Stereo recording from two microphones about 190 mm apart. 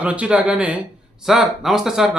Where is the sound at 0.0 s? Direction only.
5° right (ahead or behind).